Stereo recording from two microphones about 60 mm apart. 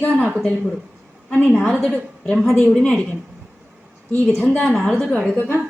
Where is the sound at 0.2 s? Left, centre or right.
Centre.